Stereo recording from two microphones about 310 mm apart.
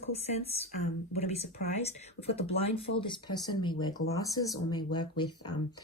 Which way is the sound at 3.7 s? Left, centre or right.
Left.